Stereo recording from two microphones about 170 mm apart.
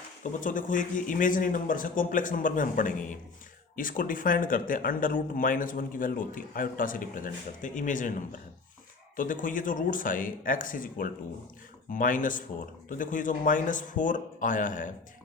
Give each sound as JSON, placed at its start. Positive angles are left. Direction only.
{"t": 0.2, "sound": "speech", "side_deg": 50}